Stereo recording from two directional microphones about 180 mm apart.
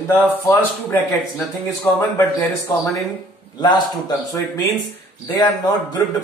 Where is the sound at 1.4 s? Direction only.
15° left (ahead or behind).